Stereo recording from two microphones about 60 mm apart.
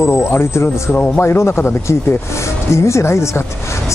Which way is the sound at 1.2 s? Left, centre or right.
Left.